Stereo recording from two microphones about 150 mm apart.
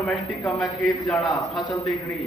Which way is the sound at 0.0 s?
5° left (ahead or behind).